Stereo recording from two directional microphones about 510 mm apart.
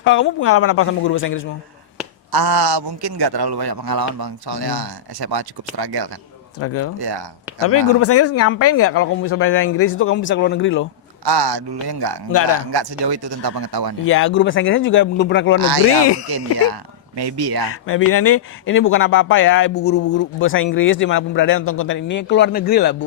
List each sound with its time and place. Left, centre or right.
0.0 s speech: left
2.3 s a man's voice: right
6.6 s speech: left
7.0 s a man's voice: right
7.7 s speech: left
11.3 s a man's voice: right
14.0 s speech: left
17.2 s a man's voice: right
17.8 s speech: left